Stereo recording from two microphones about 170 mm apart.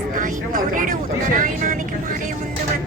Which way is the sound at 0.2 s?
50° right (ahead or behind).